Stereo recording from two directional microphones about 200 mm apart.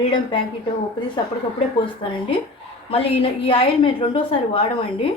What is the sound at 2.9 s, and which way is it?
A woman's voice, 30° left (ahead or behind).